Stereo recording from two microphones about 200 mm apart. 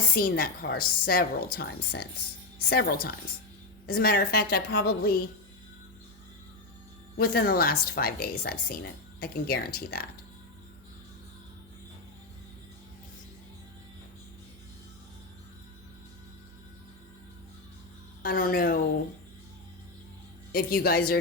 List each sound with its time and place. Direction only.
0.1 s a woman's voice: 45° left (ahead or behind)
7.2 s a woman's voice: 50° left (ahead or behind)
18.2 s a woman's voice: 45° left (ahead or behind)
20.5 s a woman's voice: 45° left (ahead or behind)